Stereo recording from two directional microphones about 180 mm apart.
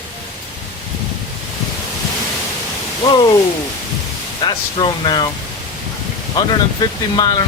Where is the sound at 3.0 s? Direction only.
25° left (ahead or behind).